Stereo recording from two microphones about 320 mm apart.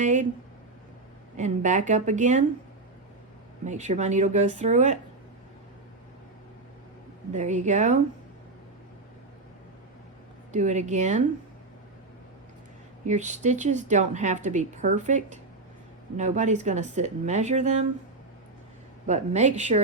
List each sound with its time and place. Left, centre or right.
0.0 s a woman's voice: right
1.4 s a woman's voice: right
3.7 s a woman's voice: right
7.3 s a woman's voice: right
10.5 s a woman's voice: right
13.1 s a woman's voice: right
19.0 s a woman's voice: right